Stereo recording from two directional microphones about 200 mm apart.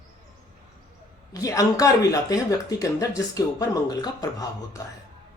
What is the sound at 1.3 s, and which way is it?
Speech, 15° left (ahead or behind).